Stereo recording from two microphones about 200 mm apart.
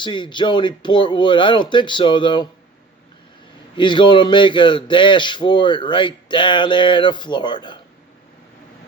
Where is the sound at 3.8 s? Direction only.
25° left (ahead or behind).